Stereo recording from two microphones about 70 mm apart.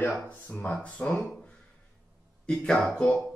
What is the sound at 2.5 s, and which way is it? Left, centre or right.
Speech, centre.